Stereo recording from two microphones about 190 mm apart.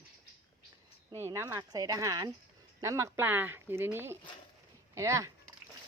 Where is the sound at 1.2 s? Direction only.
15° right (ahead or behind).